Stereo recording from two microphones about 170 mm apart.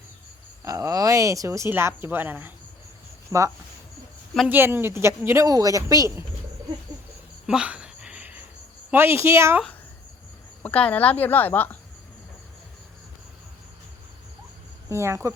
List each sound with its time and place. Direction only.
0.6 s speech: 20° right (ahead or behind)
7.4 s a sound: 5° right (ahead or behind)
8.9 s speech: 15° right (ahead or behind)
10.6 s speech: 10° left (ahead or behind)
14.8 s speech: 15° right (ahead or behind)